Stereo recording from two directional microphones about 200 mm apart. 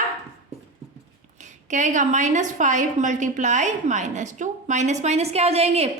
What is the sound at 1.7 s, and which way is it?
A woman's voice, 40° right (ahead or behind).